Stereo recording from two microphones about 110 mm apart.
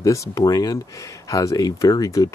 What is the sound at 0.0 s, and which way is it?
Speech, 30° left (ahead or behind).